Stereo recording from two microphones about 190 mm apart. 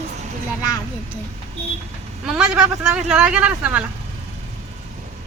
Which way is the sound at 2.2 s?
5° right (ahead or behind).